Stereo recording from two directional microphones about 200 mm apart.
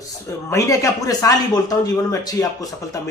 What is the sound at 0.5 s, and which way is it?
A man's voice, 15° left (ahead or behind).